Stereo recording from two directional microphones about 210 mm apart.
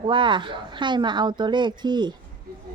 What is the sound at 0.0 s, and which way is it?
Speech, 25° right (ahead or behind).